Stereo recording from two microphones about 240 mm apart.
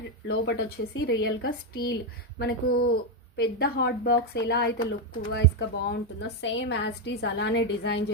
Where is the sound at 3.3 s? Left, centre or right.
Left.